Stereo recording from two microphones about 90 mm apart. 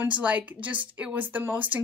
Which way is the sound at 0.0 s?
15° right (ahead or behind).